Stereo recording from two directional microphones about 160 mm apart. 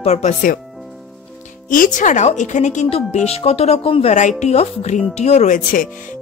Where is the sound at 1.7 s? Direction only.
55° left (ahead or behind).